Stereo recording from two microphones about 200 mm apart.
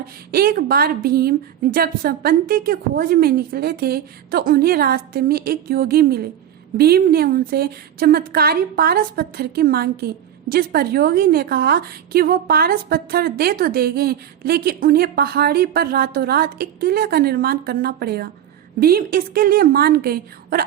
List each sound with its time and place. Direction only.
0.3 s a woman's voice: 50° right (ahead or behind)